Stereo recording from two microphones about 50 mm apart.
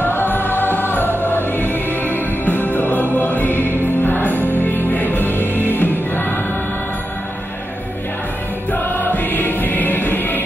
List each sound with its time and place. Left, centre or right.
0.0 s music: left
8.7 s music: left